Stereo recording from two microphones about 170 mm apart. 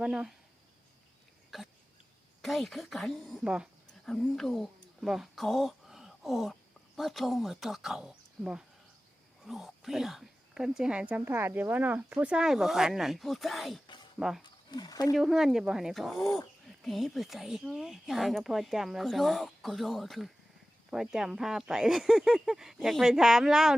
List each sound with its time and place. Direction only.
0.0 s a woman's voice: 5° right (ahead or behind)
1.5 s throat clearing: centre (ahead or behind)
2.4 s a woman's voice: centre (ahead or behind)
14.4 s speech: 25° left (ahead or behind)
15.1 s a woman's voice: centre (ahead or behind)